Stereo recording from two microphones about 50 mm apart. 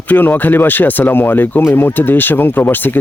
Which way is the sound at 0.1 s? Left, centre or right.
Left.